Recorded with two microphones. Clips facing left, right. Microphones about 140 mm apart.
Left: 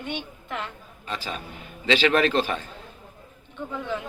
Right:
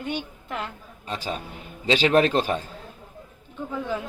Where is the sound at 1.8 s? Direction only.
40° right (ahead or behind).